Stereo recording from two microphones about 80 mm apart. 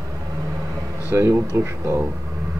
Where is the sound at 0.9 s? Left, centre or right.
Right.